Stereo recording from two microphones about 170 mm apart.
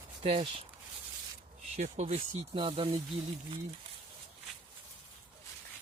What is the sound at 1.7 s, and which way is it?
Speech, 40° right (ahead or behind).